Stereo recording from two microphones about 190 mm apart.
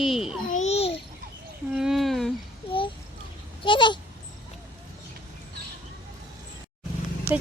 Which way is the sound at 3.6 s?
25° left (ahead or behind).